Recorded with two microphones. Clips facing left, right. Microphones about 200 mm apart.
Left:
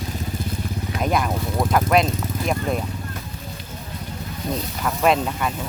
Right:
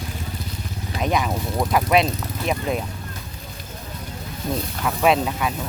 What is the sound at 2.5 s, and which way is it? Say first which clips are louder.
Speech: even; centre (ahead or behind).